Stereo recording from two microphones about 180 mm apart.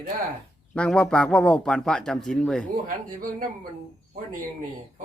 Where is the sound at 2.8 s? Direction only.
50° right (ahead or behind).